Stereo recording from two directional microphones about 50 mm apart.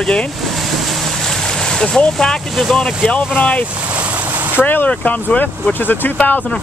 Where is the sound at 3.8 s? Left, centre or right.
Right.